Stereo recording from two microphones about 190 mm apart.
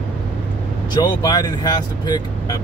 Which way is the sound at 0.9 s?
25° left (ahead or behind).